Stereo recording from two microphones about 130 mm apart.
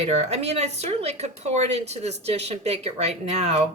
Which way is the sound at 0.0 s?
55° right (ahead or behind).